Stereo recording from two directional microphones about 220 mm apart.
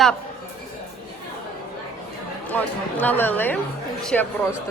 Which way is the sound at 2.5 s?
10° left (ahead or behind).